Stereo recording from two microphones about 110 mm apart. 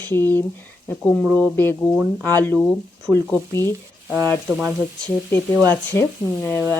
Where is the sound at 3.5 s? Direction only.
25° left (ahead or behind).